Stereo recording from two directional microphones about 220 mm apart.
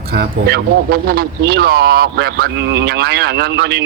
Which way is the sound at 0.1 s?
45° right (ahead or behind).